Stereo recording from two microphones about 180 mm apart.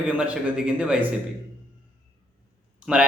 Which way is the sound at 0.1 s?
10° right (ahead or behind).